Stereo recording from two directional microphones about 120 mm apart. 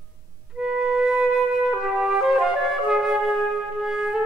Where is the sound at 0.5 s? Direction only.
5° right (ahead or behind).